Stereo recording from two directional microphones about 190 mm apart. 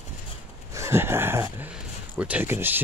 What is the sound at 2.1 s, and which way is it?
Speech, 5° right (ahead or behind).